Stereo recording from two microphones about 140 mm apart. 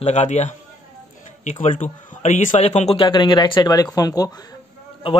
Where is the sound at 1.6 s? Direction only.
60° left (ahead or behind); by 4.4 s 25° left (ahead or behind).